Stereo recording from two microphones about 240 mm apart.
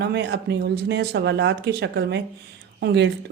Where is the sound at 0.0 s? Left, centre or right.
Right.